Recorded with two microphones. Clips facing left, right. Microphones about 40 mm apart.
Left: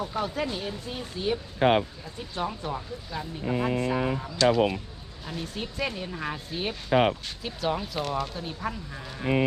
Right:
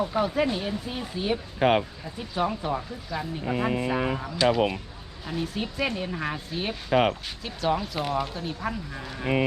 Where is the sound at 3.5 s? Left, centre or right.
Right.